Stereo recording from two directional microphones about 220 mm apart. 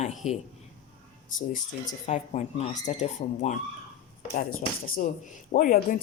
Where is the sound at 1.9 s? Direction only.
30° left (ahead or behind).